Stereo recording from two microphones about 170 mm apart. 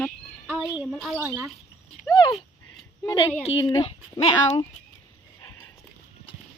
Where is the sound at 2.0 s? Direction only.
25° left (ahead or behind).